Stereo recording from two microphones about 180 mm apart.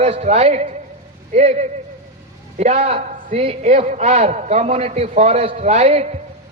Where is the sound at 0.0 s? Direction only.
35° right (ahead or behind).